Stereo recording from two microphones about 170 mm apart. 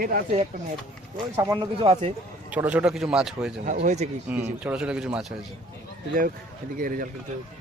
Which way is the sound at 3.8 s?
40° right (ahead or behind).